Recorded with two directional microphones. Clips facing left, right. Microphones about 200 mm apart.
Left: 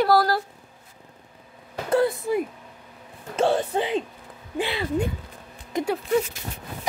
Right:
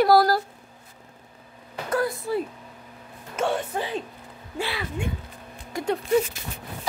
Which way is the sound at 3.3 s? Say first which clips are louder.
Left 4 dB; 30° left (ahead or behind).